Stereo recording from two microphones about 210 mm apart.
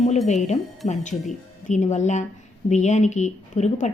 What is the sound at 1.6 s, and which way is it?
A woman's voice, 35° left (ahead or behind).